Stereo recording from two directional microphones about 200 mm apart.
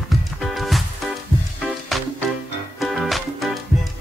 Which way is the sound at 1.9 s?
Centre (ahead or behind).